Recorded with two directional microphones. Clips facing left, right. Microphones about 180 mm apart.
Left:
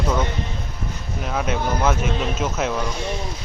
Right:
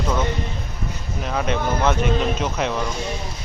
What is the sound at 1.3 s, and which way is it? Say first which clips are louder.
Speech: right 1 dB; 5° left (ahead or behind).